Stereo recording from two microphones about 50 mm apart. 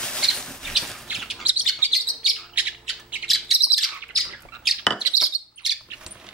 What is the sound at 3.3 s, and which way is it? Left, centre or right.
Bird, centre.